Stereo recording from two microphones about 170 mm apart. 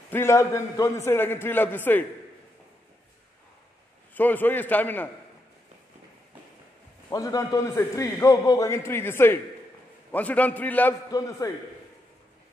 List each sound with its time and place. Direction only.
0.1 s a man's voice: 15° left (ahead or behind)
4.1 s a man's voice: 10° left (ahead or behind)
7.1 s a man's voice: 20° left (ahead or behind)
11.1 s a man's voice: 20° left (ahead or behind)